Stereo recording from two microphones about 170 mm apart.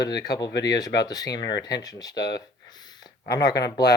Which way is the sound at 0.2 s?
25° left (ahead or behind).